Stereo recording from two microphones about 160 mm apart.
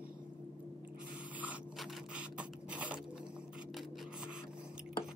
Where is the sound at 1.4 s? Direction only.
5° right (ahead or behind).